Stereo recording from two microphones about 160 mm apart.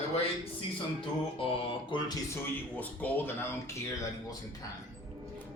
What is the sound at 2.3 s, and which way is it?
A man's voice, 10° left (ahead or behind).